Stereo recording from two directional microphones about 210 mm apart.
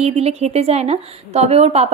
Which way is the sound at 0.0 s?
30° right (ahead or behind).